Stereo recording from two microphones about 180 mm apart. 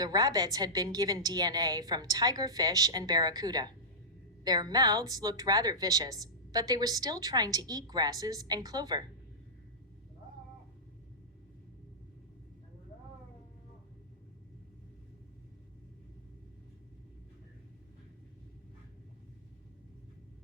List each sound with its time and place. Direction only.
0.0 s a woman's voice: 20° right (ahead or behind)